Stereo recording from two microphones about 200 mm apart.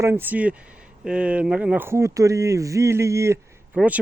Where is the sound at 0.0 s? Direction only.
10° right (ahead or behind).